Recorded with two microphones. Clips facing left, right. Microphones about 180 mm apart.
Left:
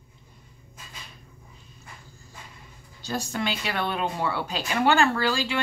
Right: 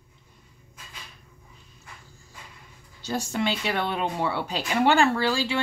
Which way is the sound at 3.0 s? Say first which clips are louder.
Right 2 dB; 25° right (ahead or behind).